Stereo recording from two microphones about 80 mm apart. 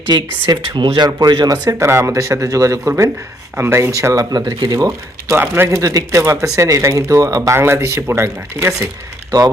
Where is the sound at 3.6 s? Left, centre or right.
Right.